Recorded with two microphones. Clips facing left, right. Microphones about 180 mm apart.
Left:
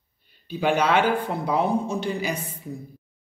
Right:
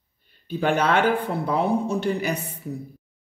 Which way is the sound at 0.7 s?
55° right (ahead or behind).